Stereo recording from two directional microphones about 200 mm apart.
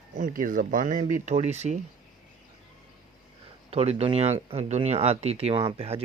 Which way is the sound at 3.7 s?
30° right (ahead or behind).